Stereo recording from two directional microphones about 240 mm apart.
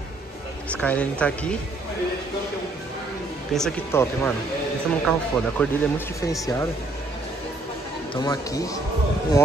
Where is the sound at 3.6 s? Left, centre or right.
Centre.